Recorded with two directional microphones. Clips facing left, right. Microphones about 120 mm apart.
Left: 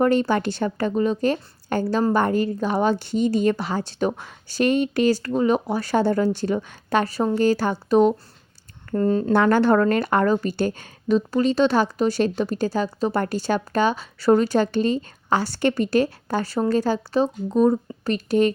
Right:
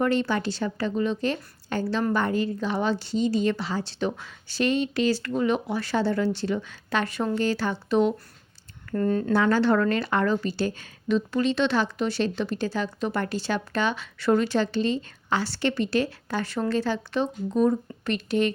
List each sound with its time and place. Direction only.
0.0 s speech: 45° left (ahead or behind)
8.9 s speech: 30° left (ahead or behind)
9.3 s speech: 55° left (ahead or behind)